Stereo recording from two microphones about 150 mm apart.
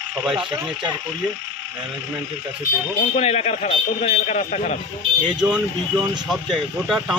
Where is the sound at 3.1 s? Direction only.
45° left (ahead or behind).